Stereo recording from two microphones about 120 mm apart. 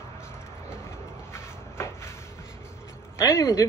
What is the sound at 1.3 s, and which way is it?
Cupboard open or close, 20° left (ahead or behind).